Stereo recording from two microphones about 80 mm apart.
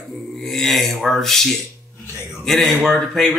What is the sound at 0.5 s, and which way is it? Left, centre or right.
Speech, centre.